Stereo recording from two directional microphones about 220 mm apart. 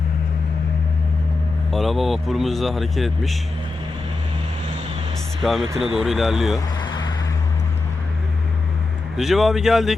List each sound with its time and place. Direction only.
1.7 s speech: centre (ahead or behind)
5.4 s speech: centre (ahead or behind)
6.7 s vehicle: 20° left (ahead or behind)
9.1 s speech: centre (ahead or behind)